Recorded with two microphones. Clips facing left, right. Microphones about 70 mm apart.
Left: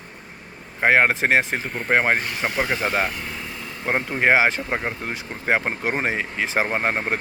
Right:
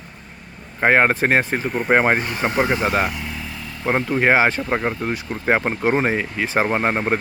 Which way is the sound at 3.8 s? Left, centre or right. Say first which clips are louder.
Right 3 dB; centre.